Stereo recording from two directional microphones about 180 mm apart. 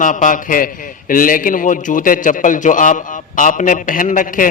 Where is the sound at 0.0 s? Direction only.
45° left (ahead or behind).